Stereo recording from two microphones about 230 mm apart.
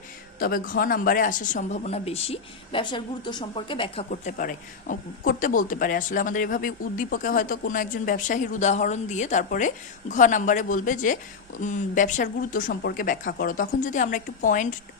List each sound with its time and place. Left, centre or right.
0.3 s speech: left
4.1 s speech: left